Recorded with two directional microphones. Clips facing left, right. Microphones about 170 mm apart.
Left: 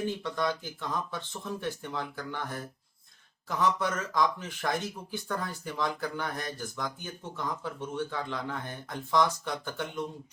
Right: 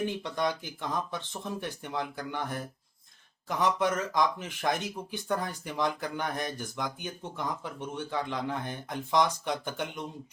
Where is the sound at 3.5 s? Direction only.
20° right (ahead or behind).